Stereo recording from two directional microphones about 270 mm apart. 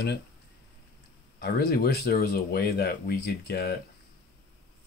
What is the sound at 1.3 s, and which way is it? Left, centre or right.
Speech, left.